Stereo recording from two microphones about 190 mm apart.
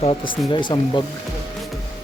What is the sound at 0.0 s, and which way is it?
Speech, 25° left (ahead or behind).